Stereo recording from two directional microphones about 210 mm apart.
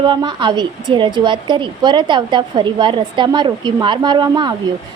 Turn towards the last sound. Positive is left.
turn(degrees=-20)  # may be behind; listen again after turning